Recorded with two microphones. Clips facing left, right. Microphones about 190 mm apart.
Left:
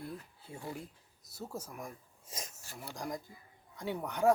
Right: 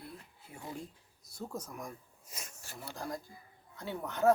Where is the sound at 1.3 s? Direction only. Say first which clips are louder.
Right 1 dB; 5° left (ahead or behind).